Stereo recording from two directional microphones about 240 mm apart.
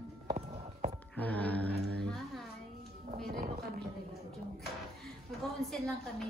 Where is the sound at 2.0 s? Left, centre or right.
Centre.